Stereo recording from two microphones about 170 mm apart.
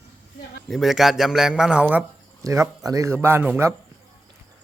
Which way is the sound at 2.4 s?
20° right (ahead or behind).